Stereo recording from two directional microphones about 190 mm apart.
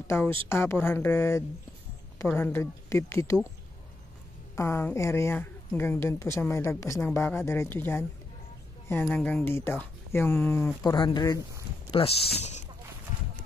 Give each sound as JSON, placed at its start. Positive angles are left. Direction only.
{"t": 0.1, "sound": "a woman's voice", "side_deg": 10}
{"t": 4.6, "sound": "a woman's voice", "side_deg": 15}